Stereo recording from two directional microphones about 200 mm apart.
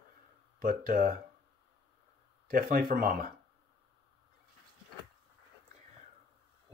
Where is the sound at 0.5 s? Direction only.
45° right (ahead or behind).